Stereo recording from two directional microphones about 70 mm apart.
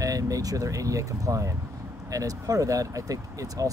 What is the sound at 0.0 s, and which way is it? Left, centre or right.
Speech, right.